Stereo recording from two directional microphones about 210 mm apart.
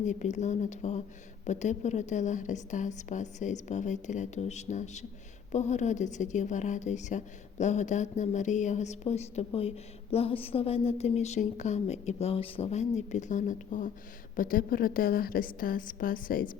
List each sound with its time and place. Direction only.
0.0 s a woman's voice: 35° left (ahead or behind)